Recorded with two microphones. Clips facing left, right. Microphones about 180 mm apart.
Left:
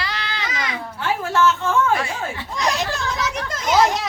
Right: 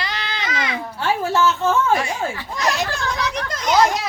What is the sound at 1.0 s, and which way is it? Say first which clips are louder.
Speech: even; 30° right (ahead or behind).